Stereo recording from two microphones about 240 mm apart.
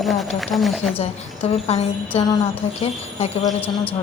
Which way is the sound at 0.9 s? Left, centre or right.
Left.